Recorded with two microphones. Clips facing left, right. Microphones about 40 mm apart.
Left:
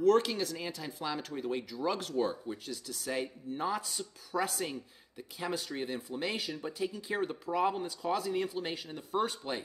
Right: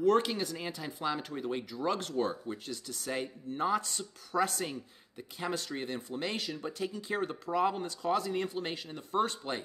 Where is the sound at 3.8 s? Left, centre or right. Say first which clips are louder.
Even; centre.